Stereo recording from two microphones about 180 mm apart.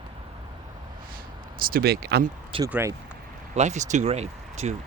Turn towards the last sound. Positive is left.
turn(degrees=-35)  # may be behind; listen again after turning